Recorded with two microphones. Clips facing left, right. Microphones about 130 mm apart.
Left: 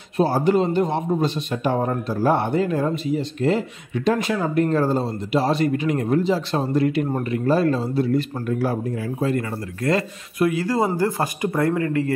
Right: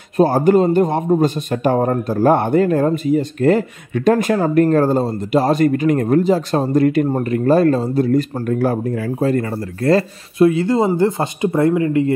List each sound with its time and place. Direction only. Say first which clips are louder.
0.2 s a man's voice: right 6 dB; 50° right (ahead or behind)
9.2 s speech: right 5 dB; 40° right (ahead or behind); by 12.1 s 20° right (ahead or behind)